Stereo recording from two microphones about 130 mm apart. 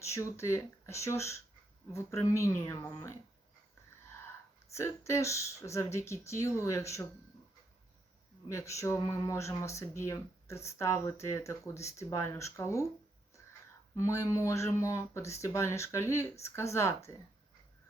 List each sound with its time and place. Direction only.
0.0 s speech: 20° left (ahead or behind)
4.7 s speech: 20° left (ahead or behind)
8.4 s speech: 25° left (ahead or behind)
13.9 s speech: 25° left (ahead or behind)